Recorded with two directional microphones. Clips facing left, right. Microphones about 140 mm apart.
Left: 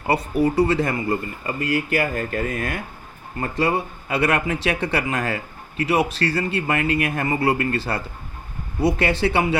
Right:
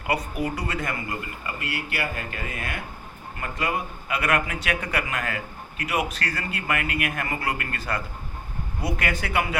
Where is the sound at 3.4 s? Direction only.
35° left (ahead or behind).